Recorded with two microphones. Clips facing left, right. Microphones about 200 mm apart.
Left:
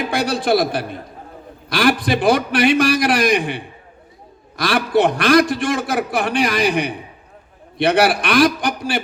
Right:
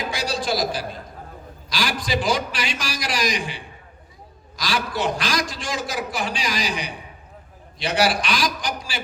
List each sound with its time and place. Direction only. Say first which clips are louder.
0.1 s a man's voice: left 9 dB; 60° left (ahead or behind)